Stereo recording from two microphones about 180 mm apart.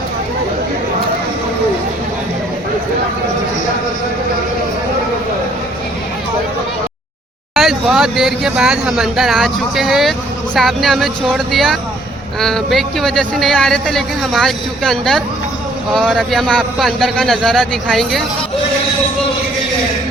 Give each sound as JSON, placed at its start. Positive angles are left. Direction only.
{"t": 7.5, "sound": "speech", "side_deg": 0}